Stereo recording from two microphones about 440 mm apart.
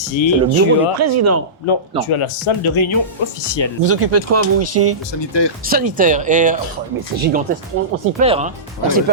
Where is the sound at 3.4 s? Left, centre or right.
Left.